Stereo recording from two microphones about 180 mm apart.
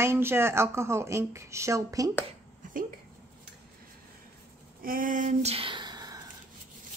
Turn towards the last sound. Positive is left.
turn(degrees=-20)  # may be behind; listen again after turning